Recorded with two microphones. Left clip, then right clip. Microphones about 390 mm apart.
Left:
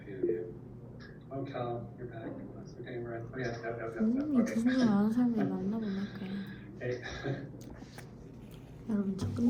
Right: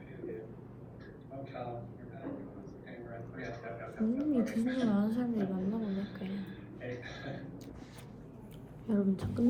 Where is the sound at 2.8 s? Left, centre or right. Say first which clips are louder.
Left 8 dB; left.